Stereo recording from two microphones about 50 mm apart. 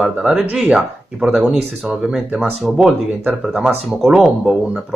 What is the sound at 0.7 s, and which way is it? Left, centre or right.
Speech, centre.